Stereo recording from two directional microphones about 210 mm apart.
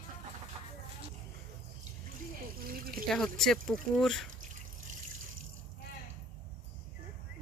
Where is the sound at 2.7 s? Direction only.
45° right (ahead or behind).